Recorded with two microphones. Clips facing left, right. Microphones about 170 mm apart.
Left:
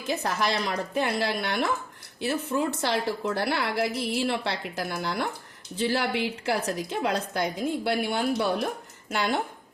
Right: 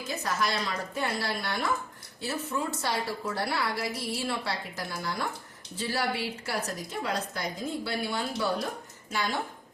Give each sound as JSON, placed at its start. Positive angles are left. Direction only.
{"t": 0.1, "sound": "a woman's voice", "side_deg": 60}